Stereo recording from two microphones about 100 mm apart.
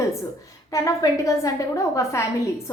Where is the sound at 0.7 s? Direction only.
30° left (ahead or behind).